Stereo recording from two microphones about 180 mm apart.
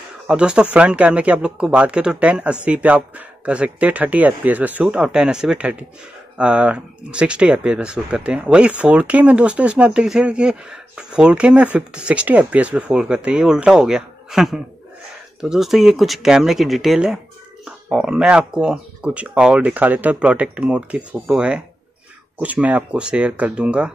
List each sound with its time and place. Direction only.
0.3 s speech: 5° right (ahead or behind)